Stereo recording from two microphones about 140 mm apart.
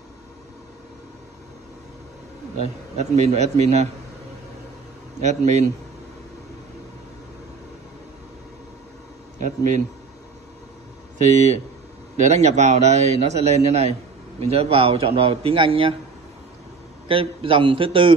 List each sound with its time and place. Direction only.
2.6 s a man's voice: 55° right (ahead or behind)
5.2 s speech: 55° right (ahead or behind)
9.4 s speech: 60° right (ahead or behind)
12.2 s a man's voice: 50° right (ahead or behind)
17.1 s a man's voice: 40° right (ahead or behind)